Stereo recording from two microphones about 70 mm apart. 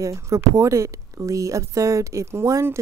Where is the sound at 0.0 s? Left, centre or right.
Right.